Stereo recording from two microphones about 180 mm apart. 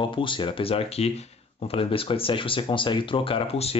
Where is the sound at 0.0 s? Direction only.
25° left (ahead or behind).